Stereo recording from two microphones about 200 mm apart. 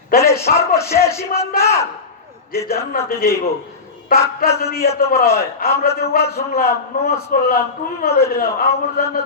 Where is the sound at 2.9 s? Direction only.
45° left (ahead or behind).